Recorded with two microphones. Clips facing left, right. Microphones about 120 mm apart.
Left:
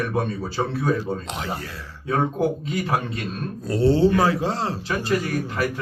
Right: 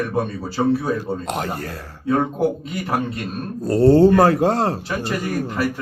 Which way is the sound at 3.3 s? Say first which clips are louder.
Right 5 dB; 40° right (ahead or behind).